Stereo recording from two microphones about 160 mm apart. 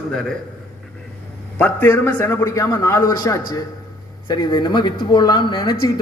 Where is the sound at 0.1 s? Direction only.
5° left (ahead or behind).